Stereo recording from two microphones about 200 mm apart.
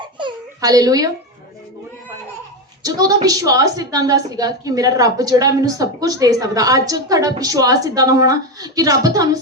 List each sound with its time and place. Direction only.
0.2 s babbling: 20° right (ahead or behind)
2.8 s a woman's voice: 20° right (ahead or behind)